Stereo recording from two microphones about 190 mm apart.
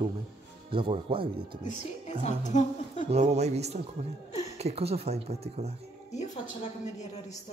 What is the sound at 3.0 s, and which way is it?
Speech, 35° right (ahead or behind).